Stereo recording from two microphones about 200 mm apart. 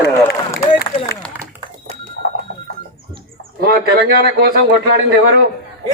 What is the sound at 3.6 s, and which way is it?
Speech, 50° right (ahead or behind).